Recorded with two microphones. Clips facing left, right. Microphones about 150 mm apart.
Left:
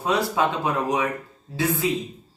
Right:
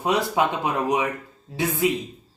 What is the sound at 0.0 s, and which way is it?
A man's voice, 15° right (ahead or behind).